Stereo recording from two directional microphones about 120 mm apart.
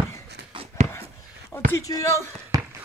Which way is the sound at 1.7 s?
30° left (ahead or behind).